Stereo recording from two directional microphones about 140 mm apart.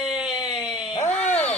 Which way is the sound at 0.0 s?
5° right (ahead or behind).